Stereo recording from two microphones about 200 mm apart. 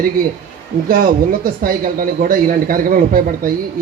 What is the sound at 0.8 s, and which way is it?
Speech, 45° right (ahead or behind).